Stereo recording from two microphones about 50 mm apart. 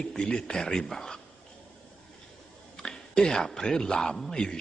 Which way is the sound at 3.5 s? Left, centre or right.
Centre.